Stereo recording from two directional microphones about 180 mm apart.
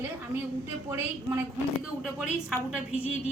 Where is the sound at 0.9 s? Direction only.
15° right (ahead or behind).